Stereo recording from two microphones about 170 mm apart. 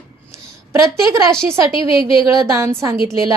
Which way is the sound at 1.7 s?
30° left (ahead or behind).